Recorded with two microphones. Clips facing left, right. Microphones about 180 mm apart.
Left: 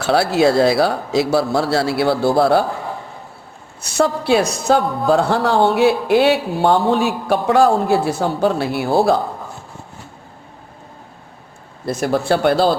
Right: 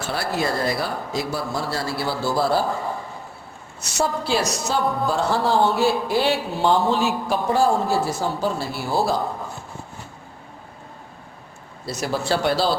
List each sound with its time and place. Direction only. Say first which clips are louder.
0.0 s speech: left 10 dB; 75° left (ahead or behind)
3.8 s a woman's voice: left 6 dB; 60° left (ahead or behind)
11.9 s speech: left 6 dB; 55° left (ahead or behind)